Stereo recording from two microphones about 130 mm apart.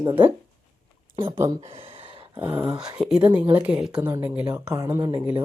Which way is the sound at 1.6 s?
45° right (ahead or behind).